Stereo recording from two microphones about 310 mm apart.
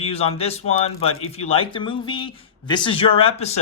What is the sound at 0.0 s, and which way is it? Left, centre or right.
Speech, centre.